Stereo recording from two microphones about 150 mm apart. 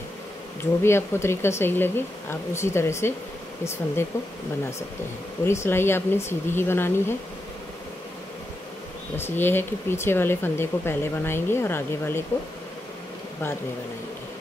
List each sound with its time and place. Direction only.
0.6 s speech: 15° left (ahead or behind)
5.4 s speech: 15° left (ahead or behind)
9.1 s speech: 15° left (ahead or behind)